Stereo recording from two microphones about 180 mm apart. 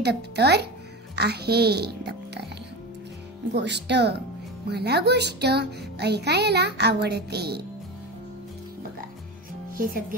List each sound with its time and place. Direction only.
0.0 s speech: 65° right (ahead or behind)
3.5 s a child's voice: 70° right (ahead or behind)